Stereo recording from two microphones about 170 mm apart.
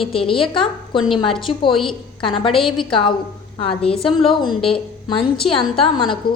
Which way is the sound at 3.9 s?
5° left (ahead or behind).